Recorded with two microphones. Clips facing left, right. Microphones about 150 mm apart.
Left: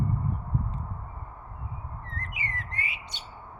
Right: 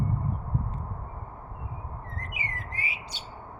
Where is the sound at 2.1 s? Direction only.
10° right (ahead or behind).